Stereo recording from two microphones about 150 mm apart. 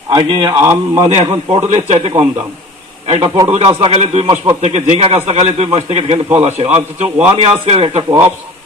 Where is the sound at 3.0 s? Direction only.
45° right (ahead or behind).